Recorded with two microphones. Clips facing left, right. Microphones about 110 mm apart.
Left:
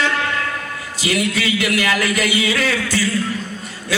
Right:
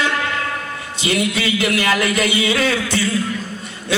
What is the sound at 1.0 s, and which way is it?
Speech, 25° right (ahead or behind).